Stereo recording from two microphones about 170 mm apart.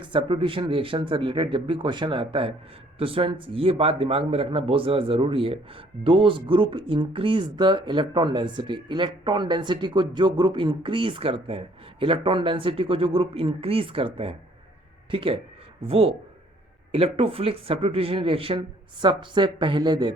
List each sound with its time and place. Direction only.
0.0 s a man's voice: 30° right (ahead or behind)